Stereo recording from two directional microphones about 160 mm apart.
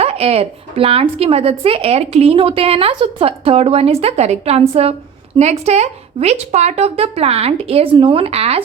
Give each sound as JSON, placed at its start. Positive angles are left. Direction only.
{"t": 0.0, "sound": "speech", "side_deg": -40}